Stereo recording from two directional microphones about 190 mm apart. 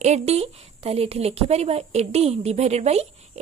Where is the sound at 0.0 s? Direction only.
35° right (ahead or behind).